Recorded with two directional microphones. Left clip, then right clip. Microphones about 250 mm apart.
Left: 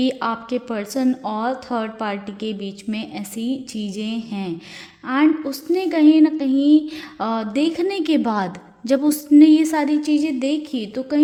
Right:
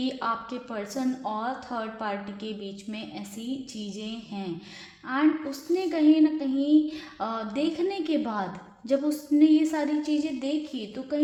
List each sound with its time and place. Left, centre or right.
0.0 s a woman's voice: left